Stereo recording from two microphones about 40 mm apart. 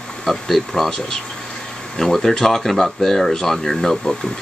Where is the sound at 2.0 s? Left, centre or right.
Centre.